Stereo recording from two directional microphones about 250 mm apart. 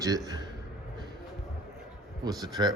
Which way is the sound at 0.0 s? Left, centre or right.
Centre.